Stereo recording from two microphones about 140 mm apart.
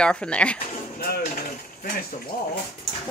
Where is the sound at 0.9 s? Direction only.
90° left.